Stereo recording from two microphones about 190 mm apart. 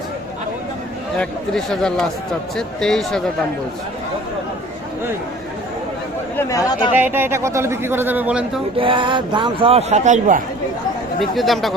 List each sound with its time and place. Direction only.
1.2 s speech: 5° left (ahead or behind)
6.3 s speech: 15° left (ahead or behind)
7.0 s a man's voice: 10° right (ahead or behind)
8.8 s a man's voice: 25° right (ahead or behind); by 10.4 s 40° right (ahead or behind)
11.2 s speech: centre (ahead or behind)